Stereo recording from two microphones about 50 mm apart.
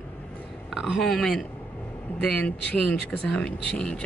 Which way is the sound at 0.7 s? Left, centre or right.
Centre.